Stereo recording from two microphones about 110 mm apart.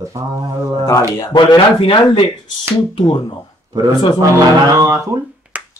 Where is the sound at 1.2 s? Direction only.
40° left (ahead or behind).